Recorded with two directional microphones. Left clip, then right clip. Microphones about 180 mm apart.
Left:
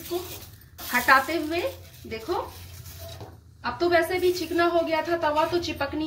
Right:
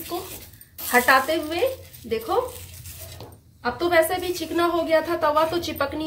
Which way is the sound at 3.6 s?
45° right (ahead or behind).